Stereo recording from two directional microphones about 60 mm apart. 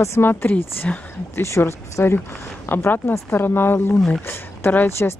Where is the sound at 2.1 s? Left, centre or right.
Left.